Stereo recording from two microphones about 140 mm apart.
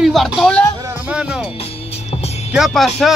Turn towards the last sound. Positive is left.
turn(degrees=0)  # may be behind; listen again after turning